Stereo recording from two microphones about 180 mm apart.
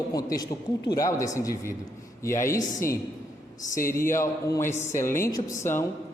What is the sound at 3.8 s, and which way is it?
Speech, 15° left (ahead or behind).